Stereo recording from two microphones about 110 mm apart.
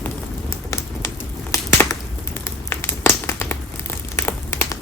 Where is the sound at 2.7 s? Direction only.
20° left (ahead or behind).